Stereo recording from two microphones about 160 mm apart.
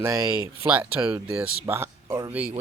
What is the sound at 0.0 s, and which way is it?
Speech, 20° right (ahead or behind).